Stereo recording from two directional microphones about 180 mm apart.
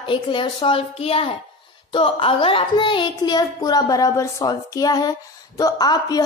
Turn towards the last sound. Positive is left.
turn(degrees=20)  # may be behind; listen again after turning